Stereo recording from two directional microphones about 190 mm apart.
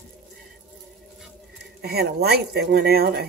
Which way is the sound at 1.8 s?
55° right (ahead or behind).